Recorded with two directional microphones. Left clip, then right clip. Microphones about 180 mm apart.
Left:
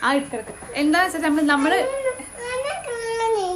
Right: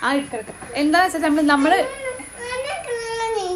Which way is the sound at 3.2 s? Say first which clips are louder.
Left 3 dB; 30° left (ahead or behind).